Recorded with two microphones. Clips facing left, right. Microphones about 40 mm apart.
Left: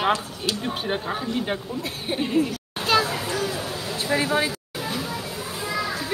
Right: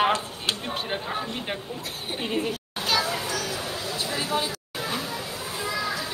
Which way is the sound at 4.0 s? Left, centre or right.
Left.